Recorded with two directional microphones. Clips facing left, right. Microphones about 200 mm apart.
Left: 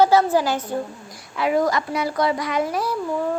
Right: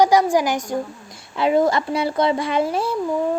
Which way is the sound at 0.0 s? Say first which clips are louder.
Right 1 dB; 15° right (ahead or behind).